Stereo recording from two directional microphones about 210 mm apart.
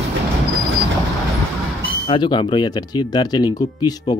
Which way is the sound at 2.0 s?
20° left (ahead or behind).